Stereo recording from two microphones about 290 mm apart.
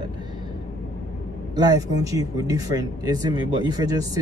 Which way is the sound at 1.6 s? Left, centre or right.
Centre.